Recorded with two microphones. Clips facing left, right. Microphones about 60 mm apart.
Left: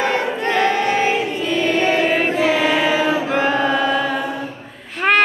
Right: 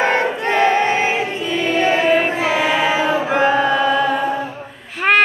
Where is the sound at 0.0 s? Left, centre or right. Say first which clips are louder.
Right 2 dB; right.